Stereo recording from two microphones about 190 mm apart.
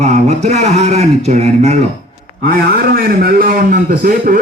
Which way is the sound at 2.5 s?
50° right (ahead or behind).